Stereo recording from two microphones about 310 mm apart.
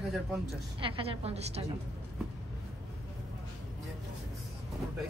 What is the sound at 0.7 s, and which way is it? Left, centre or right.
Speech, centre.